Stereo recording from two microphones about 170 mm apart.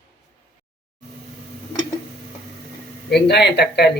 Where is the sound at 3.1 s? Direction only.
75° left (ahead or behind).